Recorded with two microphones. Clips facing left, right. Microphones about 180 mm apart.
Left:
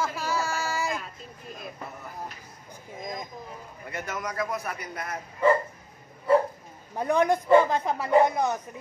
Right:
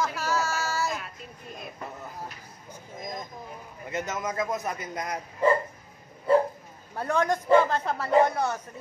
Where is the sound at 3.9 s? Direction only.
20° right (ahead or behind).